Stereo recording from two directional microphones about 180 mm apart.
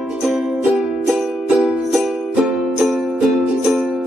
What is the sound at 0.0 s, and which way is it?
Music, centre (ahead or behind).